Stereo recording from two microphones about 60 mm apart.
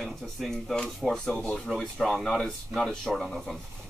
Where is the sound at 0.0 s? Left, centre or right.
Centre.